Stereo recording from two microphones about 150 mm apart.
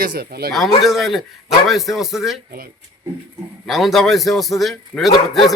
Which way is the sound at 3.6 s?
Centre (ahead or behind).